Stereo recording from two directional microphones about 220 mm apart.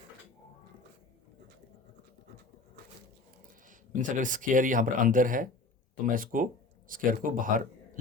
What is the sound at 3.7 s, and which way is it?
A man's voice, 35° right (ahead or behind).